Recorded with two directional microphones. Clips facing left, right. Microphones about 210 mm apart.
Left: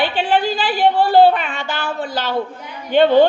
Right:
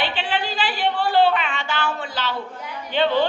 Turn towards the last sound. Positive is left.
turn(degrees=45)  # may be behind; listen again after turning